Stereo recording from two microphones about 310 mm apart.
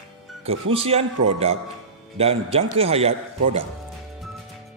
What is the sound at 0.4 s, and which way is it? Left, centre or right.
Speech, centre.